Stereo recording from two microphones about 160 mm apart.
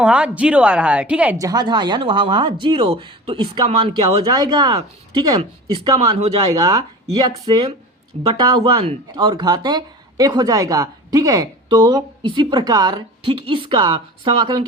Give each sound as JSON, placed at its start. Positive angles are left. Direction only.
{"t": 0.0, "sound": "a woman's voice", "side_deg": -5}
{"t": 1.4, "sound": "speech", "side_deg": -25}
{"t": 6.5, "sound": "speech", "side_deg": -25}